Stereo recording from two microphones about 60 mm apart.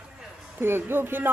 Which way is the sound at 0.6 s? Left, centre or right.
Right.